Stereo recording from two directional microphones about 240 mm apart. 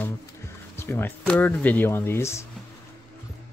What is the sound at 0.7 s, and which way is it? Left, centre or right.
Speech, centre.